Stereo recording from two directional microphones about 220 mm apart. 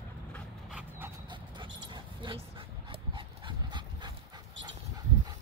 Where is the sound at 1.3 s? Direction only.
20° right (ahead or behind).